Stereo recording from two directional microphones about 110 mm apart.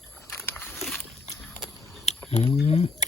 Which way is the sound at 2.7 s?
70° left (ahead or behind).